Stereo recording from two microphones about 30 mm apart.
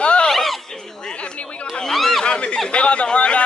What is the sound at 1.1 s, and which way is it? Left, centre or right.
A man's voice, left.